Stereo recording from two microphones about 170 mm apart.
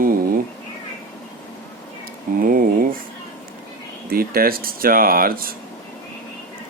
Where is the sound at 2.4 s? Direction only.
55° right (ahead or behind).